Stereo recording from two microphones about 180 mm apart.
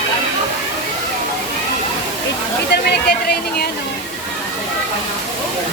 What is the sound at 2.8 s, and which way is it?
Speech, 60° left (ahead or behind).